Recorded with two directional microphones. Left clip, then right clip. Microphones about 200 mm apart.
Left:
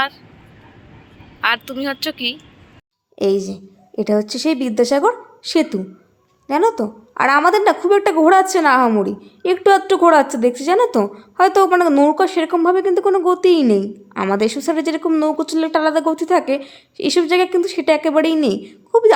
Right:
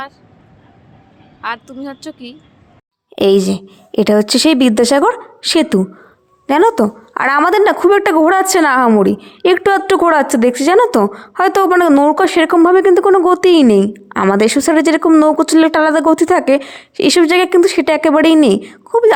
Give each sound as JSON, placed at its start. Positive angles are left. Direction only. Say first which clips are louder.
{"t": 1.4, "sound": "a woman's voice", "louder": "left 5 dB", "side_deg": 0}
{"t": 3.2, "sound": "a woman's voice", "louder": "right 7 dB", "side_deg": -35}